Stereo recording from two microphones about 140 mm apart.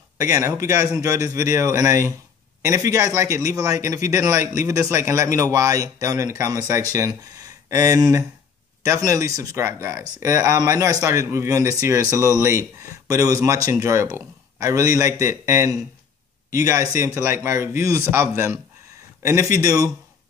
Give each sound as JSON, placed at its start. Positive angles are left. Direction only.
{"t": 0.2, "sound": "a man's voice", "side_deg": -20}